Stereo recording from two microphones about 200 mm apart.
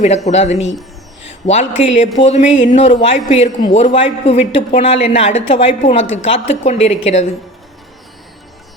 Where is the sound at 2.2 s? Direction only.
35° left (ahead or behind).